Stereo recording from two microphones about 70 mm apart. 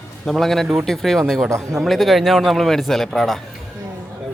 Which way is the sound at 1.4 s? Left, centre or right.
Right.